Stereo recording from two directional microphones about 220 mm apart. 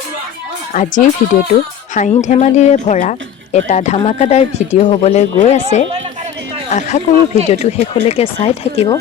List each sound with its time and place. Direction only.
0.7 s speech: 35° left (ahead or behind)